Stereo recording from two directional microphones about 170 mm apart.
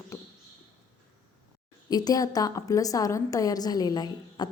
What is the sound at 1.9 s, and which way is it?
Speech, 25° left (ahead or behind).